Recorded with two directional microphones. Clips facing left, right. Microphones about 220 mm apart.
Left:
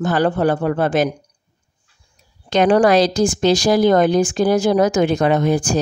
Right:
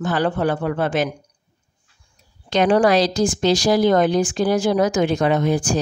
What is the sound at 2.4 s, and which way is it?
Speech, 50° left (ahead or behind).